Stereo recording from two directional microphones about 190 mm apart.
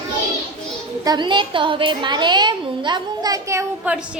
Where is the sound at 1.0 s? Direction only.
20° right (ahead or behind).